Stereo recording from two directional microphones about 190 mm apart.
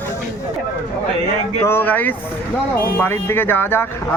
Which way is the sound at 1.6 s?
10° left (ahead or behind).